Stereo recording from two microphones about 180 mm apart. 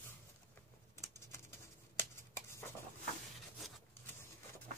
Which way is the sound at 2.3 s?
15° left (ahead or behind).